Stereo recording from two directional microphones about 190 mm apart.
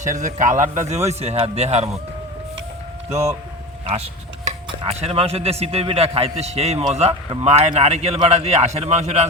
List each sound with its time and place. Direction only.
0.0 s speech: 40° right (ahead or behind)
3.8 s speech: 35° right (ahead or behind)